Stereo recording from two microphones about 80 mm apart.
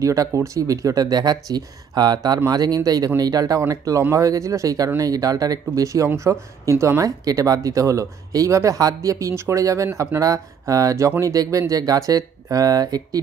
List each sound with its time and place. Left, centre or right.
0.0 s speech: right